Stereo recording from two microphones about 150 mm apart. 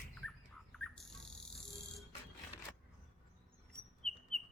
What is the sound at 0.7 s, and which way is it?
Bird, 5° left (ahead or behind).